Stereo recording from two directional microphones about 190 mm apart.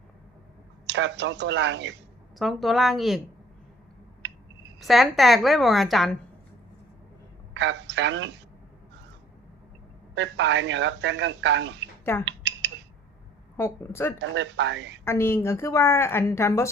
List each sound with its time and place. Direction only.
0.9 s speech: 70° right (ahead or behind)
2.4 s a woman's voice: centre (ahead or behind)
4.8 s a woman's voice: centre (ahead or behind)
7.5 s a woman's voice: 70° right (ahead or behind)
10.2 s speech: 70° right (ahead or behind)
12.2 s a sound: 70° right (ahead or behind)
13.6 s a woman's voice: 15° left (ahead or behind)
14.2 s speech: 70° right (ahead or behind)
15.0 s a woman's voice: 15° left (ahead or behind)